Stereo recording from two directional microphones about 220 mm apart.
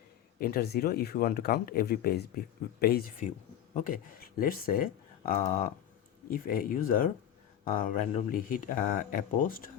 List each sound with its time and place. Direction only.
0.3 s speech: 45° left (ahead or behind)
4.4 s speech: 40° left (ahead or behind)